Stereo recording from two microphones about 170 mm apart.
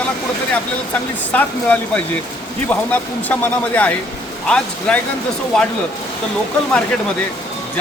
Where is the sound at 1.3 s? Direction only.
10° left (ahead or behind).